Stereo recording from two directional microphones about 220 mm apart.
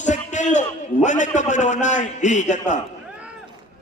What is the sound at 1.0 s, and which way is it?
A man's voice, 35° left (ahead or behind).